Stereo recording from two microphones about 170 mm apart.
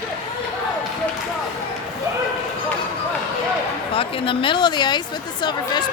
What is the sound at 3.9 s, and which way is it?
Speech, 30° left (ahead or behind).